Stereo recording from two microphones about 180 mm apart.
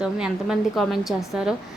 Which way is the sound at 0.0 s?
5° right (ahead or behind).